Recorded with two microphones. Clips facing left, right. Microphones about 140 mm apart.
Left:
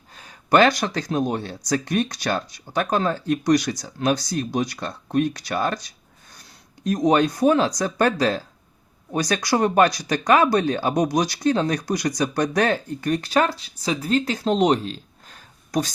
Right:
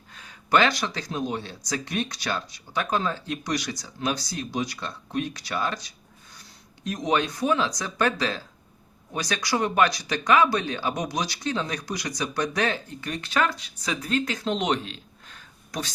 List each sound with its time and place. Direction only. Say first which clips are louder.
0.1 s speech: left 4 dB; 40° left (ahead or behind)
6.8 s speech: left 7 dB; 40° left (ahead or behind)